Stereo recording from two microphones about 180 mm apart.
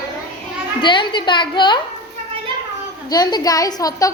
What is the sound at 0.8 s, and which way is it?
A woman's voice, 25° left (ahead or behind).